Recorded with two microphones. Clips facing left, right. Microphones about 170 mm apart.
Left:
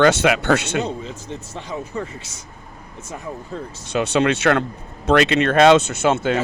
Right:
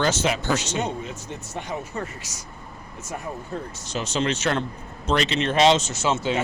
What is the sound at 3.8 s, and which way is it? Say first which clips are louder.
Speech: left 8 dB; 60° left (ahead or behind).